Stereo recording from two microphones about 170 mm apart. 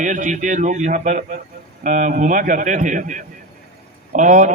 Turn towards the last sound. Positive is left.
turn(degrees=-50)  # may be behind; listen again after turning